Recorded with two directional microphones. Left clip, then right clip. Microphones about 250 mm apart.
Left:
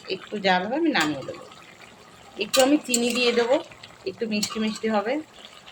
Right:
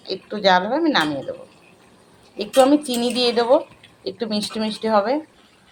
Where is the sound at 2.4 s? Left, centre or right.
Centre.